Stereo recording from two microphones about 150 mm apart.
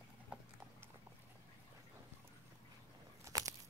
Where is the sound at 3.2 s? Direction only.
20° right (ahead or behind).